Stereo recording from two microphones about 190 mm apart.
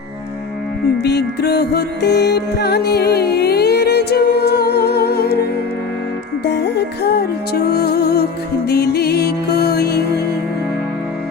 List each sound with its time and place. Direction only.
1.0 s music: 60° left (ahead or behind)